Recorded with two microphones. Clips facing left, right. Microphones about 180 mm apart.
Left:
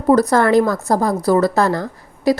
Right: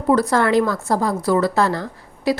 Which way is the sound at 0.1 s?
40° left (ahead or behind).